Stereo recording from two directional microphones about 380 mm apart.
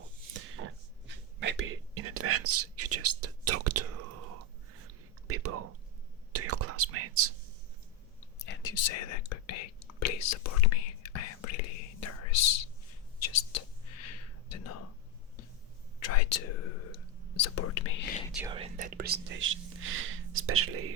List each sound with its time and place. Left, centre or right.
0.3 s whispering: right
5.3 s a sound: right
6.3 s whispering: right
8.4 s whispering: left
13.2 s a sound: left
14.0 s whispering: left
16.0 s whispering: left
18.3 s whispering: centre
18.5 s whispering: centre; by 20.9 s right